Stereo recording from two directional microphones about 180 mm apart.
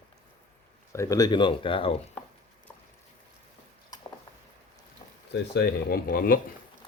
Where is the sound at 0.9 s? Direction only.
15° left (ahead or behind).